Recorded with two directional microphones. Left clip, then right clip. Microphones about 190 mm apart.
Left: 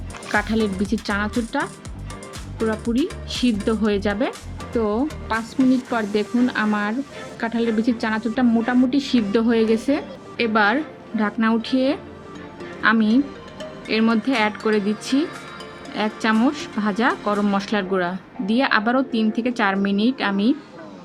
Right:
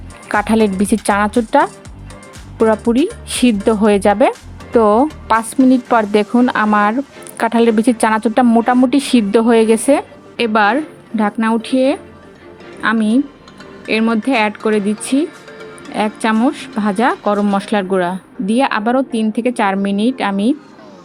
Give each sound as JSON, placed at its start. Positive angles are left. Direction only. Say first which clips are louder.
{"t": 0.3, "sound": "a woman's voice", "louder": "right 7 dB", "side_deg": -55}